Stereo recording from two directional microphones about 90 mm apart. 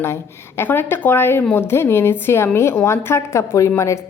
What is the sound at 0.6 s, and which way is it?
A woman's voice, 25° left (ahead or behind).